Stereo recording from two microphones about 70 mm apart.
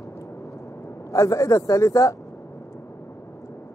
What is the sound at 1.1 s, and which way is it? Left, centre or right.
A man's voice, left.